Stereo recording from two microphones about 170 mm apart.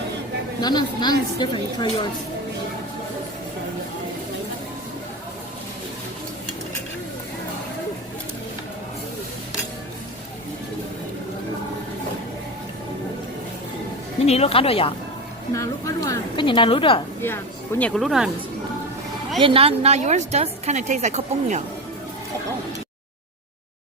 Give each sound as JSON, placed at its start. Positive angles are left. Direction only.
{"t": 0.6, "sound": "a woman's voice", "side_deg": 25}
{"t": 14.3, "sound": "speech", "side_deg": 35}
{"t": 15.5, "sound": "a woman's voice", "side_deg": 20}
{"t": 17.2, "sound": "speech", "side_deg": 15}
{"t": 19.4, "sound": "a woman's voice", "side_deg": -30}